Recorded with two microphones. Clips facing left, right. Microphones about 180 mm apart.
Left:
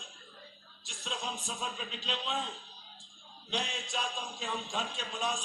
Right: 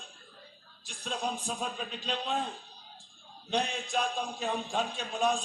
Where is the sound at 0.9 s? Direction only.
50° right (ahead or behind).